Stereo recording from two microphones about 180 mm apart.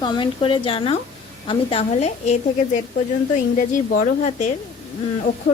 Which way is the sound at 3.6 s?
45° left (ahead or behind).